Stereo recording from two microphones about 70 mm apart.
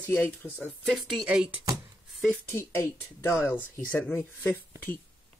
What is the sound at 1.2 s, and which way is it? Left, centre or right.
Speech, centre.